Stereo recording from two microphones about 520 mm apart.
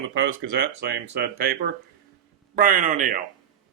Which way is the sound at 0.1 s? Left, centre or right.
Right.